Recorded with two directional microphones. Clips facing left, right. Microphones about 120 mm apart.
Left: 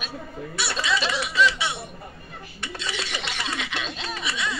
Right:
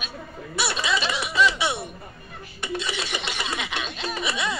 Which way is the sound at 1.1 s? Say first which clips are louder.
Right 1 dB; 15° right (ahead or behind).